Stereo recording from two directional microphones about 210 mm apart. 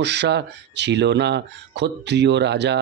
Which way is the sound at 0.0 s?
55° right (ahead or behind).